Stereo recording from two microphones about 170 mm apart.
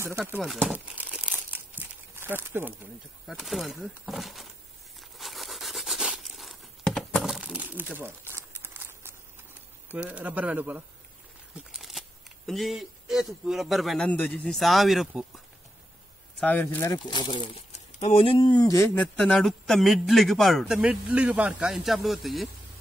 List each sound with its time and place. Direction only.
0.0 s crumpling: 10° right (ahead or behind)
3.3 s a man's voice: centre (ahead or behind)
5.1 s a sound: centre (ahead or behind)
9.8 s speech: 10° right (ahead or behind)
11.7 s a sound: centre (ahead or behind)
12.4 s a man's voice: centre (ahead or behind)
16.3 s speech: 10° left (ahead or behind)
16.9 s speech: 25° left (ahead or behind)
18.9 s a man's voice: 5° left (ahead or behind)